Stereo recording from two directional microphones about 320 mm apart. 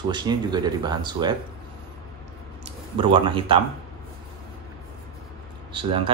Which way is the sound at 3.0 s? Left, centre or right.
Centre.